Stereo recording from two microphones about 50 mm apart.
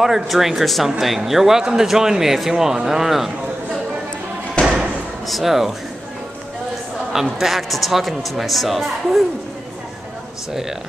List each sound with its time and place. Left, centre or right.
0.0 s a man's voice: centre
4.6 s slam: centre
5.2 s a man's voice: centre
7.1 s a man's voice: centre